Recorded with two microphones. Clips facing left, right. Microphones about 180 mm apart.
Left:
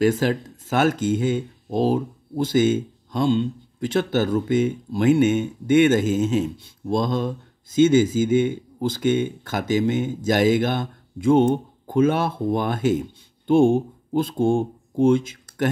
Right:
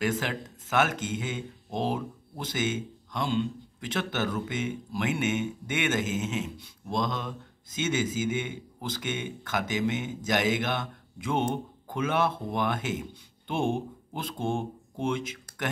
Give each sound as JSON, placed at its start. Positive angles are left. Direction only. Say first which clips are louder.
{"t": 0.0, "sound": "speech", "louder": "left 10 dB", "side_deg": 35}